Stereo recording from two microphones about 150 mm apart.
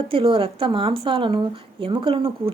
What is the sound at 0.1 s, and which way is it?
Speech, 35° right (ahead or behind).